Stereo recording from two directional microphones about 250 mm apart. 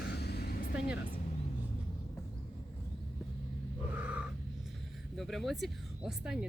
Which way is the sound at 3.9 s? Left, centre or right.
Centre.